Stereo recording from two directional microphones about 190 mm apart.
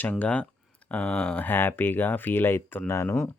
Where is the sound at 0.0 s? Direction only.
10° left (ahead or behind).